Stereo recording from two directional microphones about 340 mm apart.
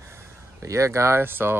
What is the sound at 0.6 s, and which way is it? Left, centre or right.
Speech, centre.